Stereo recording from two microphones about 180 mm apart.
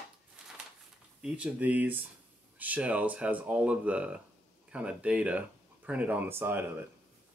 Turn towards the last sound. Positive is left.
turn(degrees=-10)  # may be behind; listen again after turning